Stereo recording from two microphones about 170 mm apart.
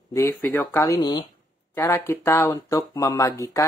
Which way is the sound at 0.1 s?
15° left (ahead or behind).